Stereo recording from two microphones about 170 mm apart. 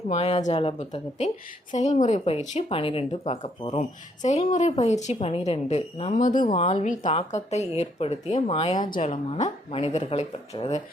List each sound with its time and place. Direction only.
0.1 s a woman's voice: 40° left (ahead or behind)